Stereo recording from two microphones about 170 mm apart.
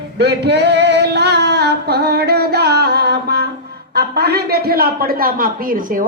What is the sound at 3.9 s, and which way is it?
A man's voice, 70° right (ahead or behind).